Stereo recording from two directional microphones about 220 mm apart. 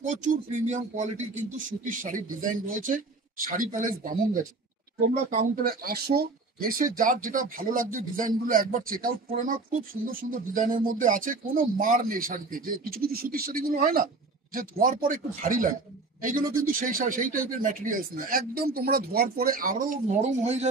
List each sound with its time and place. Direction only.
0.0 s a man's voice: 35° right (ahead or behind)